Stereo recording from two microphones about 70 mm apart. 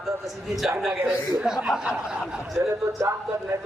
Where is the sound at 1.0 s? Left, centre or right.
Centre.